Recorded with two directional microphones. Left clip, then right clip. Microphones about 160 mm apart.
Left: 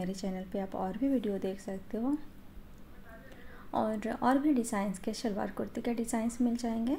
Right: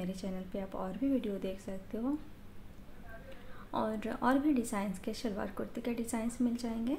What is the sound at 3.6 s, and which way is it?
A woman's voice, 20° left (ahead or behind).